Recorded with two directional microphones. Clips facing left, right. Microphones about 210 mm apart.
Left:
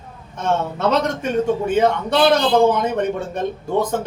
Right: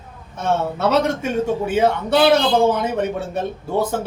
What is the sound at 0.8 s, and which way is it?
Speech, 5° right (ahead or behind).